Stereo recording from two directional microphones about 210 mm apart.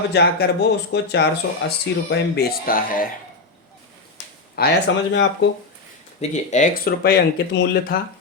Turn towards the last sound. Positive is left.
turn(degrees=55)  # may be behind; listen again after turning